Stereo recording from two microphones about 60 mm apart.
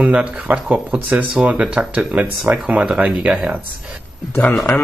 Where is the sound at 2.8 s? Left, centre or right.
Centre.